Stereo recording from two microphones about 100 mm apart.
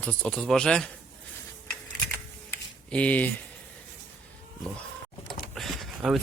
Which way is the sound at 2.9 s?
15° left (ahead or behind).